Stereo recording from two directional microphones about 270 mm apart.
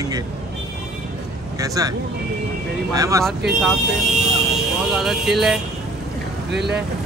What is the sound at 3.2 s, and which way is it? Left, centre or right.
Speech, centre.